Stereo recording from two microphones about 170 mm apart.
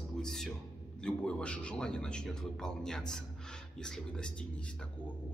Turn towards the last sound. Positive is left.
turn(degrees=5)  # may be behind; listen again after turning